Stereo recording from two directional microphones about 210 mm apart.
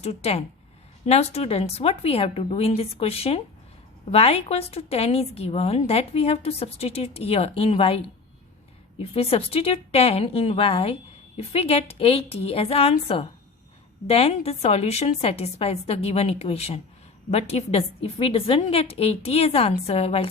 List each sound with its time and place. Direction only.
0.0 s a woman's voice: 30° left (ahead or behind)